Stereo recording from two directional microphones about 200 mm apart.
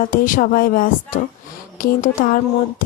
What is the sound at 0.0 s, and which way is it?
A woman's voice, 45° left (ahead or behind).